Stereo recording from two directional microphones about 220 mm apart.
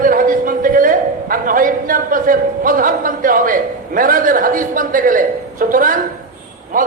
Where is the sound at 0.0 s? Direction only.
40° right (ahead or behind).